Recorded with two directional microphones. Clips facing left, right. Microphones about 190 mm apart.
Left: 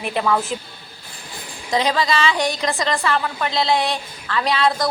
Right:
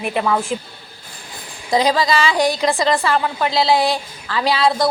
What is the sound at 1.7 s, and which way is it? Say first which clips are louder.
A woman's voice: right 3 dB; 35° right (ahead or behind).